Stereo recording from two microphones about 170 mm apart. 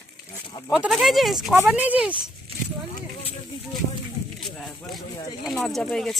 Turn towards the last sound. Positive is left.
turn(degrees=0)  # may be behind; listen again after turning